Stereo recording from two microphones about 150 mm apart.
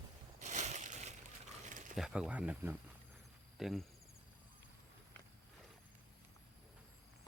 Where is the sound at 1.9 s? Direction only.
5° right (ahead or behind).